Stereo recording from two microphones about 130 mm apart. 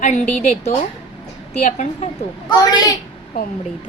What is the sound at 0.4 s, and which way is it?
A woman's voice, 55° left (ahead or behind).